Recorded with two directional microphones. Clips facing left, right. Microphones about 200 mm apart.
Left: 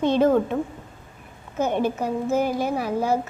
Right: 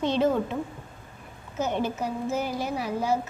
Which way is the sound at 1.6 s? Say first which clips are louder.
Left 4 dB; 55° left (ahead or behind).